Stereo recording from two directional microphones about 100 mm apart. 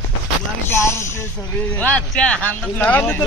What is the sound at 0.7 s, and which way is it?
Speech, 30° left (ahead or behind).